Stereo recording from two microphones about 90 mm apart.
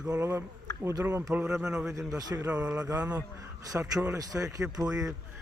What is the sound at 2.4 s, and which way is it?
Speech, 10° right (ahead or behind).